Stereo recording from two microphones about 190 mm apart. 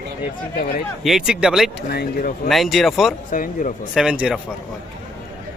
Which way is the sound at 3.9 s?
5° right (ahead or behind).